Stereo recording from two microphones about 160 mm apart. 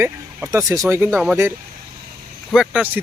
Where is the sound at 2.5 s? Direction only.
5° right (ahead or behind).